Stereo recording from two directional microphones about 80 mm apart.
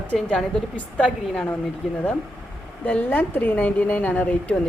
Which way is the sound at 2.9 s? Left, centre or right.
Left.